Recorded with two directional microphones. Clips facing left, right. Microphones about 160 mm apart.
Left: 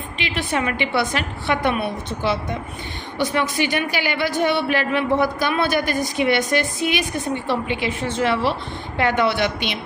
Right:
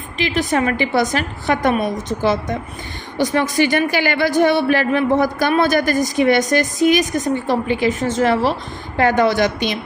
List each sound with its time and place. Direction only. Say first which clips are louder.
0.2 s a woman's voice: right 6 dB; 40° right (ahead or behind)